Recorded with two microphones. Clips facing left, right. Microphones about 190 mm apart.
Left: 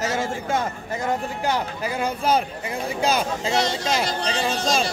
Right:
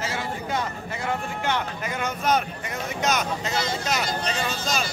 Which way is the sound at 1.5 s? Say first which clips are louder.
Left 3 dB; 30° left (ahead or behind).